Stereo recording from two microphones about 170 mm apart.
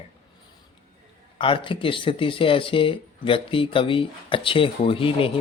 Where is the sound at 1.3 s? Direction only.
30° left (ahead or behind).